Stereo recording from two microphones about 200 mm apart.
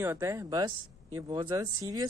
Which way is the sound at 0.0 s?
15° right (ahead or behind).